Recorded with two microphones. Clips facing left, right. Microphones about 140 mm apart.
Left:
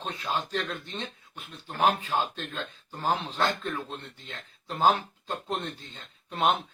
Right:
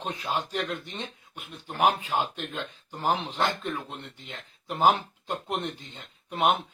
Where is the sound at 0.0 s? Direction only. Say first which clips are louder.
Right 1 dB; 15° right (ahead or behind).